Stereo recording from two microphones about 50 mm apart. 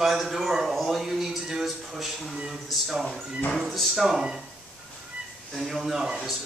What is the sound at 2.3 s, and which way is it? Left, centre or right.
Speech, centre.